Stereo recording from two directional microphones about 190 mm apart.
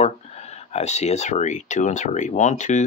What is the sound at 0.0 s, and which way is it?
Speech, 35° left (ahead or behind).